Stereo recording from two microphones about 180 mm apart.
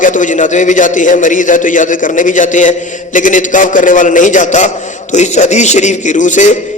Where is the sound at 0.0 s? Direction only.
45° left (ahead or behind).